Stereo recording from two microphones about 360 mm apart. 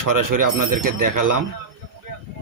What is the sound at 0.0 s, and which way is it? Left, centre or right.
Speech, right.